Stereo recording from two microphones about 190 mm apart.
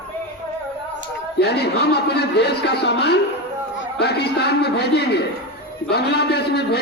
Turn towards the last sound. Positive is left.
turn(degrees=60)  # may be behind; listen again after turning